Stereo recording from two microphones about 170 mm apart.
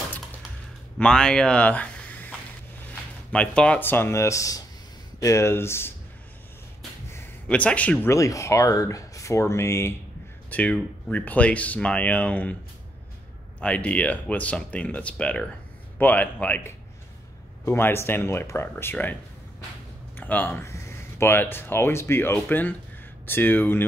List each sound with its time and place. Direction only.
0.9 s speech: 5° left (ahead or behind)
7.1 s speech: 10° left (ahead or behind)
13.6 s speech: 5° left (ahead or behind)
20.2 s speech: 10° left (ahead or behind)